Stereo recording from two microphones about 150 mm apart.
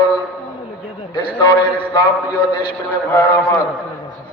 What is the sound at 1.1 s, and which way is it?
Speech, 30° left (ahead or behind).